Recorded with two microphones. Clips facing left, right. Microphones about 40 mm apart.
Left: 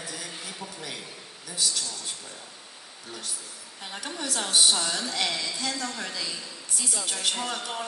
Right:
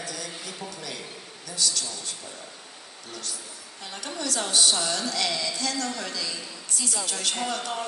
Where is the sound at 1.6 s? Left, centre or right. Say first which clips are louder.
Right 1 dB; left.